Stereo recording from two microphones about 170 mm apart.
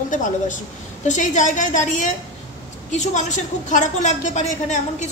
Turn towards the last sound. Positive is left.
turn(degrees=45)  # may be behind; listen again after turning